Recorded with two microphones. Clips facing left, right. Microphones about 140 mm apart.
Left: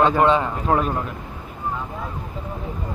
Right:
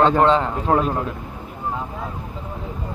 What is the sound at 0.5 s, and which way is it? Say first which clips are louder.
Speech: right 1 dB; 15° right (ahead or behind).